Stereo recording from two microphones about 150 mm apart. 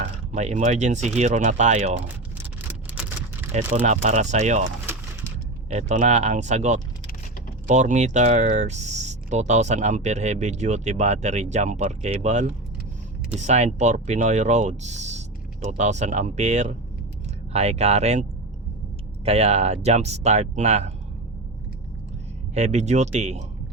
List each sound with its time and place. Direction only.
0.0 s speech: 50° right (ahead or behind)
2.6 s vehicle: 10° right (ahead or behind)
3.8 s speech: 50° right (ahead or behind)
5.7 s speech: 50° right (ahead or behind)
22.5 s speech: 50° right (ahead or behind)